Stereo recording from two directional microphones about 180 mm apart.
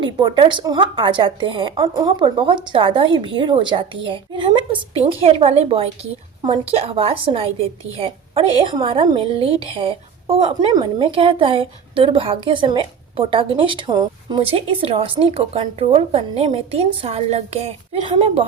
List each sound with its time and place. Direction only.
0.0 s a woman's voice: 25° right (ahead or behind)